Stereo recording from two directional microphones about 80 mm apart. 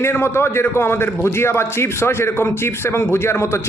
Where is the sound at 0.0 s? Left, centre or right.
Left.